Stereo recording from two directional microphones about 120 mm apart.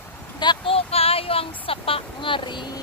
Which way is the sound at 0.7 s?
55° left (ahead or behind).